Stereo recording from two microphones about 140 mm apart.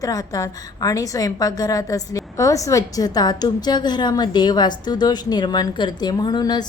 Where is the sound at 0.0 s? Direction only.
25° left (ahead or behind).